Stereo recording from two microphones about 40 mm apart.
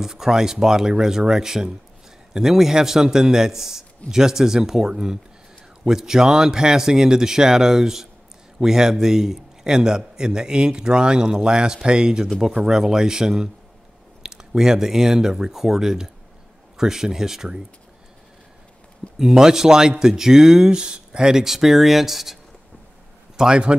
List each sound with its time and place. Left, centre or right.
0.0 s a man's voice: centre
19.1 s speech: centre
23.3 s a man's voice: centre